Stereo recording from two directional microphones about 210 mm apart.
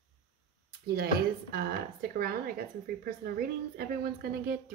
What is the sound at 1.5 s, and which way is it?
Speech, 45° right (ahead or behind).